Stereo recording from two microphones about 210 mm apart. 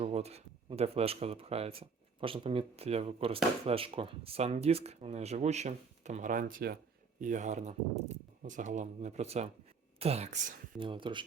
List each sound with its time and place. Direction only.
0.0 s speech: 30° right (ahead or behind)